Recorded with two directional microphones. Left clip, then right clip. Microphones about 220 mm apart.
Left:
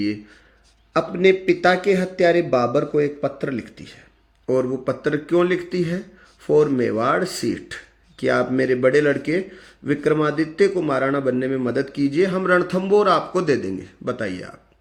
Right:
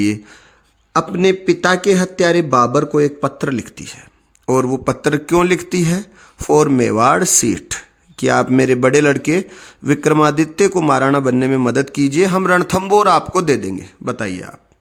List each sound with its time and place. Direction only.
0.9 s speech: 40° right (ahead or behind)